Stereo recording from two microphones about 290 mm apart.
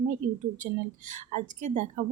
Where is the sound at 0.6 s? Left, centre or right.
Right.